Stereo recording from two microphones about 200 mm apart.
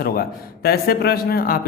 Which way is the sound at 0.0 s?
50° left (ahead or behind).